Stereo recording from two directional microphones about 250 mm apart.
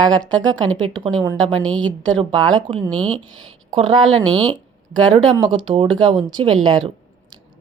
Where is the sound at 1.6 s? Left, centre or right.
Centre.